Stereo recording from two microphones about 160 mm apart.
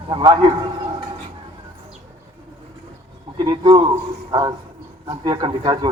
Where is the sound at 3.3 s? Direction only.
25° right (ahead or behind).